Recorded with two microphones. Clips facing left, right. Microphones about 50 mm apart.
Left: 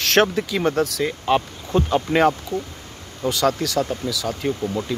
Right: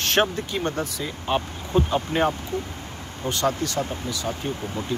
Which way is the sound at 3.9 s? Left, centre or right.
Left.